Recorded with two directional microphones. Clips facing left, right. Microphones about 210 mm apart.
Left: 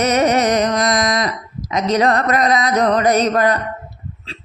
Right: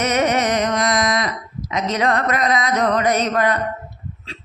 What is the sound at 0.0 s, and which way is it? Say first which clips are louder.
Music: left 3 dB; 35° left (ahead or behind).